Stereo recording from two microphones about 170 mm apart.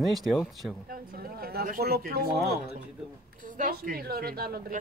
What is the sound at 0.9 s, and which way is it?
Speech, 60° right (ahead or behind).